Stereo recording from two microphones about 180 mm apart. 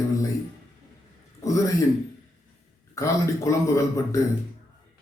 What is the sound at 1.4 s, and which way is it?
Speech, 20° left (ahead or behind).